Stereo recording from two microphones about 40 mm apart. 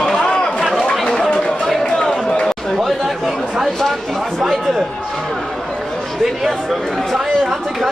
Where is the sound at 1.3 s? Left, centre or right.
Left.